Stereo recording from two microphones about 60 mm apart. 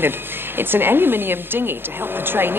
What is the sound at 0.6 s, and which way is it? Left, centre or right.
Speech, right.